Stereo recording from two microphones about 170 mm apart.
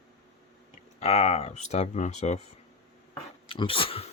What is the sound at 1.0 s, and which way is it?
Speech, 35° left (ahead or behind).